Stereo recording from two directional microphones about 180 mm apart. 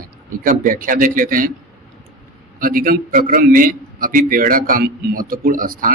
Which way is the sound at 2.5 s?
50° right (ahead or behind).